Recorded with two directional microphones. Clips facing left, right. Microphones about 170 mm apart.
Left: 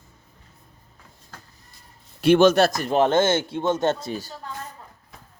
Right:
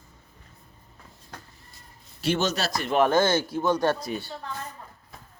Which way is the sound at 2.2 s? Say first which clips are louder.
Left 11 dB; 55° left (ahead or behind).